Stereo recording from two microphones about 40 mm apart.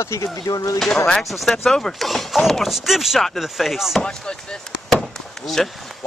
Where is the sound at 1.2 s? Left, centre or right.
Centre.